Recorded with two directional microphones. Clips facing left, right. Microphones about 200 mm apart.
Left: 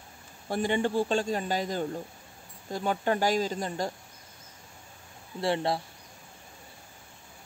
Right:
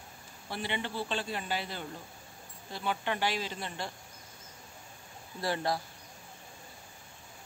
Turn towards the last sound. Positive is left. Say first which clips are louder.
# left 4 dB
turn(degrees=25)  # may be behind; listen again after turning